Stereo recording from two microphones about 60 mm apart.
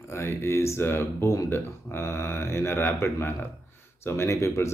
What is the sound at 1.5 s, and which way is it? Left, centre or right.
Speech, left.